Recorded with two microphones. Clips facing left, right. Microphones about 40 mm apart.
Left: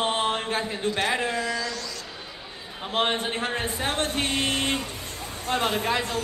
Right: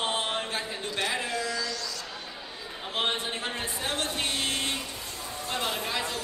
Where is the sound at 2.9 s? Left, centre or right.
Left.